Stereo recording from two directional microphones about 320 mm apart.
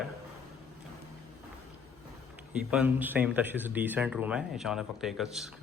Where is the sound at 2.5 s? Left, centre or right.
Centre.